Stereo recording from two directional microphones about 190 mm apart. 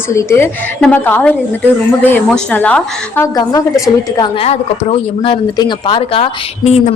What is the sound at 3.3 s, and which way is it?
Speech, 20° left (ahead or behind).